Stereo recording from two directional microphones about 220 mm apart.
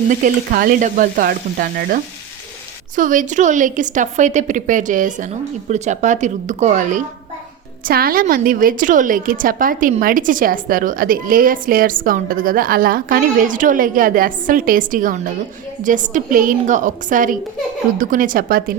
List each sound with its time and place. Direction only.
0.1 s a woman's voice: 40° right (ahead or behind)